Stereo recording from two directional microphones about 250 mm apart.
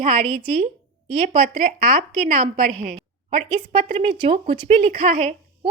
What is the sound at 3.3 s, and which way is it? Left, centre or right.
A woman's voice, right.